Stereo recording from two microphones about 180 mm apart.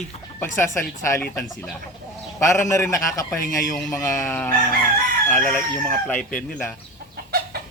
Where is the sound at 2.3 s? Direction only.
15° left (ahead or behind).